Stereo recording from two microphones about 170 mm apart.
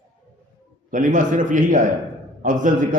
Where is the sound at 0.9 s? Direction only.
50° right (ahead or behind).